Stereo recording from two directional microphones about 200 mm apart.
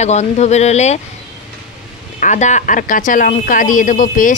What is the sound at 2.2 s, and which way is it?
Speech, 35° left (ahead or behind).